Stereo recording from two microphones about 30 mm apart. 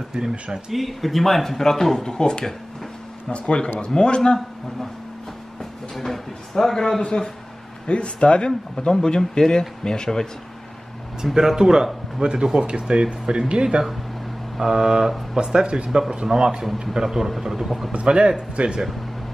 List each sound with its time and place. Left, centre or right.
0.1 s speech: right
0.7 s speech: centre
2.0 s speech: left
5.6 s speech: centre
7.0 s speech: left
8.7 s speech: left
11.3 s speech: centre
12.2 s speech: right; by 17.8 s centre
17.9 s speech: right